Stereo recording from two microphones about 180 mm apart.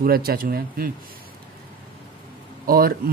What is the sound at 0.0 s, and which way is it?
Speech, 55° right (ahead or behind).